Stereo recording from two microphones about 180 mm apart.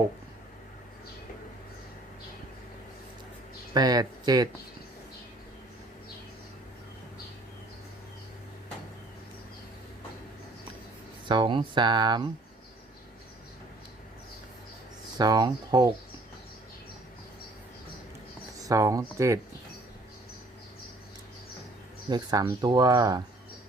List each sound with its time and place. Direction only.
3.8 s speech: 20° right (ahead or behind)
11.3 s speech: 25° right (ahead or behind)
15.2 s speech: 20° right (ahead or behind)
18.6 s speech: 20° right (ahead or behind)
22.1 s speech: 20° right (ahead or behind)